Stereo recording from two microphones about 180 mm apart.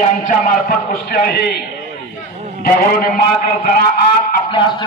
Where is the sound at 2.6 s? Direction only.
55° left (ahead or behind).